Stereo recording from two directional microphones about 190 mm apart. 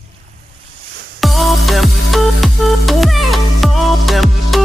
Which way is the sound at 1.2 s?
Centre (ahead or behind).